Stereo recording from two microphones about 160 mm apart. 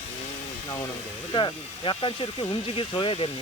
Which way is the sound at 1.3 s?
30° left (ahead or behind).